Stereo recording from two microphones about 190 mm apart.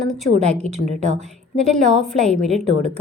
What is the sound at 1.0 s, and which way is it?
Speech, 35° right (ahead or behind).